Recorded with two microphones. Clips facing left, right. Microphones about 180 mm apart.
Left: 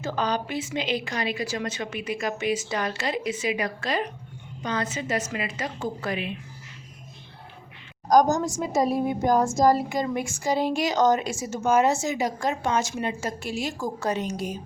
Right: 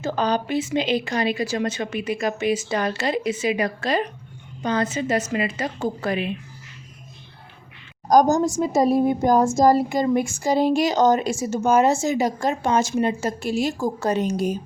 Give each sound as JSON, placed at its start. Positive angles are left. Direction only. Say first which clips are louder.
{"t": 0.0, "sound": "a woman's voice", "louder": "right 4 dB", "side_deg": -30}
{"t": 8.1, "sound": "speech", "louder": "right 3 dB", "side_deg": -30}